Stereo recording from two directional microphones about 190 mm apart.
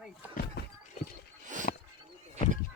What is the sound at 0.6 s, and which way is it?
Horse, 60° left (ahead or behind).